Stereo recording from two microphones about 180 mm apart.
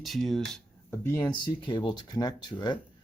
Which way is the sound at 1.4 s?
25° left (ahead or behind).